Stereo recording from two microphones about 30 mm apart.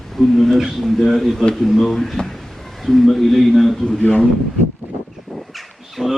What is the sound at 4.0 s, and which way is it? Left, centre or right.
Speech, left.